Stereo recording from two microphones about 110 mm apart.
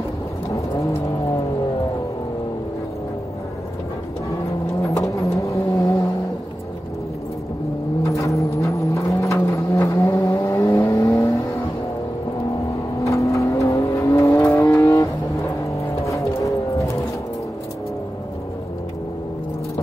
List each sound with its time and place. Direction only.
4.9 s vehicle: 30° left (ahead or behind)
8.0 s vehicle: 30° left (ahead or behind)
13.0 s vehicle: 30° left (ahead or behind)
16.1 s music: 30° left (ahead or behind)